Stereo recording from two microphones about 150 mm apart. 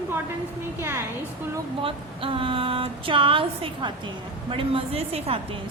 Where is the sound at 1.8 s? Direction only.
35° right (ahead or behind).